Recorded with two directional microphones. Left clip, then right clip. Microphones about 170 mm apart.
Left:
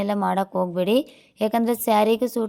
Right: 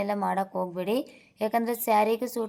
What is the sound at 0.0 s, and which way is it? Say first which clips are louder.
A woman's voice: left 4 dB; 30° left (ahead or behind).